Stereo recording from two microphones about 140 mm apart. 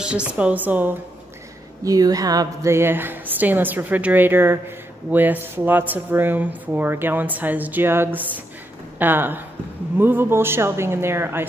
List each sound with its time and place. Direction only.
0.0 s speech: 10° right (ahead or behind)
1.9 s speech: 25° right (ahead or behind)